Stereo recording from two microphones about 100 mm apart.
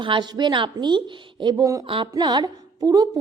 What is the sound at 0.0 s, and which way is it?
A woman's voice, 50° right (ahead or behind).